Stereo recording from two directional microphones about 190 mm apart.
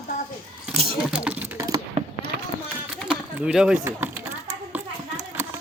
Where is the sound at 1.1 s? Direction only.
5° right (ahead or behind).